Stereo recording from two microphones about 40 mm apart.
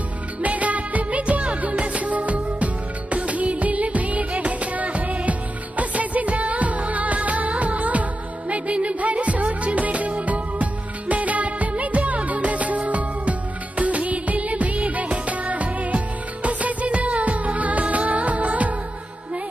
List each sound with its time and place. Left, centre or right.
0.4 s music: right